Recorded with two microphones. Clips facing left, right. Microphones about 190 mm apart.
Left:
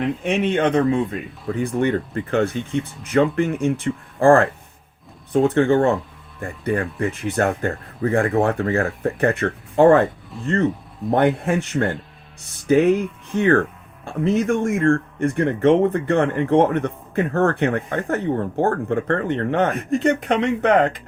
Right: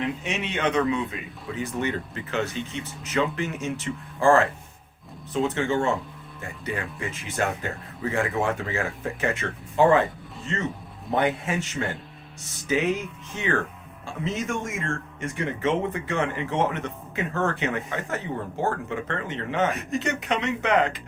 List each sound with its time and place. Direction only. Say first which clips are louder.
0.0 s a man's voice: left 8 dB; 55° left (ahead or behind)